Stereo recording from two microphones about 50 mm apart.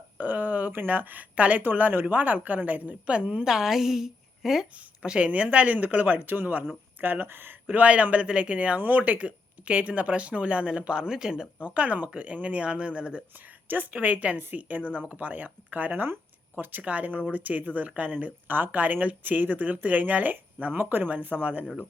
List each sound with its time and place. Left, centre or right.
0.2 s a sound: right
0.9 s speech: right
3.4 s a woman's voice: centre
5.0 s speech: right
7.8 s speech: right
8.8 s speech: right; by 11.4 s centre
11.6 s speech: right
13.7 s speech: right